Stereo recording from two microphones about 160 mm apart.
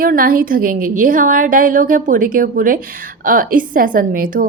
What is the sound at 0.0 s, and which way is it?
A woman's voice, 65° right (ahead or behind).